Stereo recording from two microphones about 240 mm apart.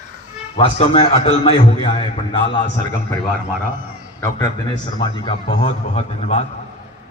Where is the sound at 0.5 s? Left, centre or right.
Left.